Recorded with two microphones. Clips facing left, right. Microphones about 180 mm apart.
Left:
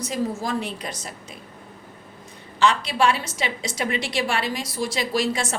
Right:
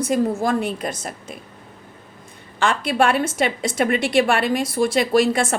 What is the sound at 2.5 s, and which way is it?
A woman's voice, 55° right (ahead or behind).